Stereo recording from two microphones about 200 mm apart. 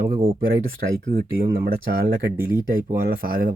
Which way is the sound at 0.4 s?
45° right (ahead or behind).